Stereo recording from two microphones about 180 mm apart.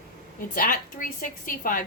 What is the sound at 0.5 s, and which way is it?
A woman's voice, 50° left (ahead or behind).